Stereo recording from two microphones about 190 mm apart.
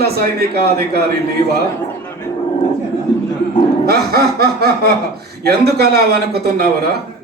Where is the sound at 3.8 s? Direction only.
55° right (ahead or behind).